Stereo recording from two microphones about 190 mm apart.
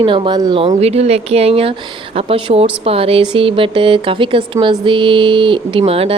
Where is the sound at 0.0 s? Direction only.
25° right (ahead or behind).